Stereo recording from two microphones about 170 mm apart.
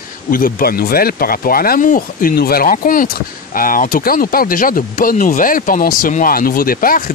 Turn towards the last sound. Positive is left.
turn(degrees=55)  # may be behind; listen again after turning